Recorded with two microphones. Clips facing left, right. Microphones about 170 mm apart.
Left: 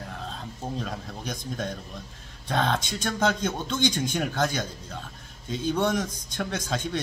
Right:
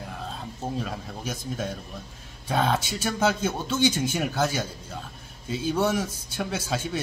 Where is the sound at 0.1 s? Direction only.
5° right (ahead or behind).